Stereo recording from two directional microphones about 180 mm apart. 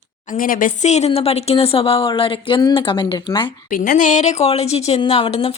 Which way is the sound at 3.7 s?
50° left (ahead or behind).